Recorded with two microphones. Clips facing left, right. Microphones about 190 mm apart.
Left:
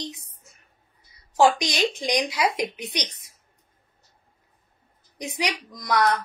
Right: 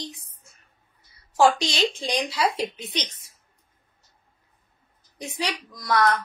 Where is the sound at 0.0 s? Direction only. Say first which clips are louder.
Left 2 dB; 20° left (ahead or behind).